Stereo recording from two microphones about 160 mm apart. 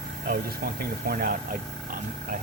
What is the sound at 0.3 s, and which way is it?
Speech, 75° right (ahead or behind).